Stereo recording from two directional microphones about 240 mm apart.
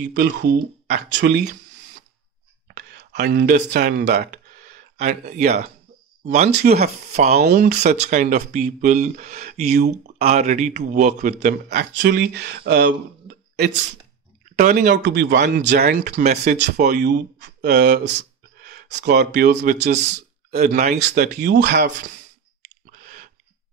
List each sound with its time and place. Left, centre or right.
0.1 s a man's voice: right
2.7 s a man's voice: right
6.5 s a man's voice: right
7.8 s a man's voice: right
14.5 s a man's voice: right
16.5 s a man's voice: right
22.8 s a sound: right